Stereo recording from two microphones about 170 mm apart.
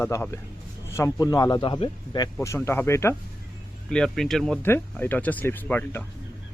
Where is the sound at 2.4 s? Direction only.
15° left (ahead or behind).